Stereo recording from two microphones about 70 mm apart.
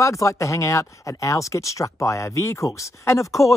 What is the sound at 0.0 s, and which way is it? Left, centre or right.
Speech, left.